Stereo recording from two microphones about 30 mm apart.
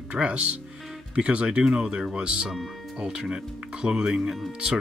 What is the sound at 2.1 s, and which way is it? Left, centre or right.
Speech, right.